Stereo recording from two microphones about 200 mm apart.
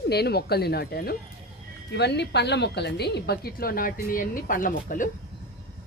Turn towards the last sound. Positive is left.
turn(degrees=45)  # may be behind; listen again after turning